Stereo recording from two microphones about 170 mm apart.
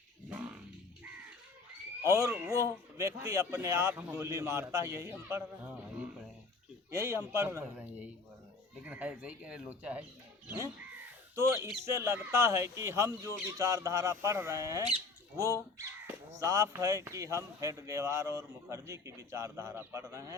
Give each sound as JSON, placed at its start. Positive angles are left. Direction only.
{"t": 2.0, "sound": "speech", "side_deg": -20}